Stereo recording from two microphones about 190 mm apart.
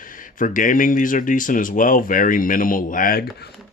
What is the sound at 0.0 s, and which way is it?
Speech, 45° left (ahead or behind).